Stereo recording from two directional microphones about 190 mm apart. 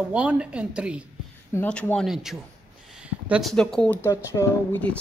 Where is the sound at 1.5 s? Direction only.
10° left (ahead or behind).